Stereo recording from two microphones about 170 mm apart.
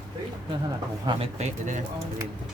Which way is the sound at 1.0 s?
25° right (ahead or behind).